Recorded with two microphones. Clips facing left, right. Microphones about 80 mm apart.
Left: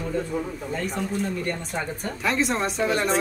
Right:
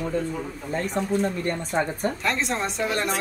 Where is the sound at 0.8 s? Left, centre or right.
Right.